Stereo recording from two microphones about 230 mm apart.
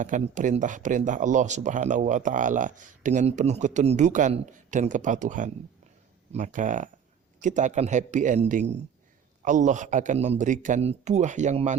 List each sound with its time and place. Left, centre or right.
0.0 s speech: right